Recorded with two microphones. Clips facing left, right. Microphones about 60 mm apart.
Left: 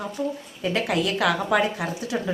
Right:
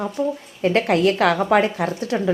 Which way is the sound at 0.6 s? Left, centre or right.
Right.